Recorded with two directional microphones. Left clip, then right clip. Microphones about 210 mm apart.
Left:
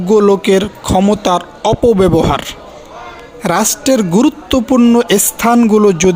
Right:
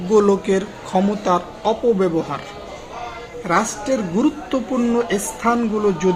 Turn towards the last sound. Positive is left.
turn(degrees=50)  # may be behind; listen again after turning